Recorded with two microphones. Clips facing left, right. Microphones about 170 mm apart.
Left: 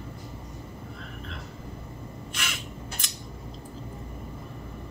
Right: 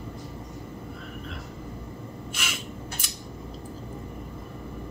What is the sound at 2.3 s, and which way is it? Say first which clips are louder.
Crow: right 1 dB; 10° right (ahead or behind).